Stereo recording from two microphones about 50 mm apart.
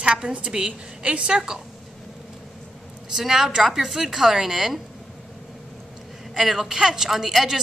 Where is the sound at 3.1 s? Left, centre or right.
Centre.